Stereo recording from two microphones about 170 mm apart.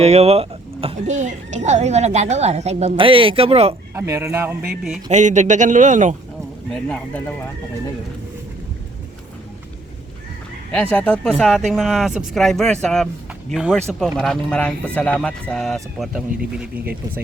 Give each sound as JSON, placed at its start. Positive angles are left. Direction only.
{"t": 0.0, "sound": "speech", "side_deg": -40}
{"t": 3.9, "sound": "speech", "side_deg": -15}
{"t": 5.1, "sound": "a man's voice", "side_deg": -45}
{"t": 6.8, "sound": "speech", "side_deg": 10}
{"t": 10.8, "sound": "speech", "side_deg": 10}